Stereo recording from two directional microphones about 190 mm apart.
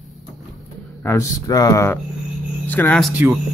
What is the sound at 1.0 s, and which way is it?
Speech, 15° left (ahead or behind).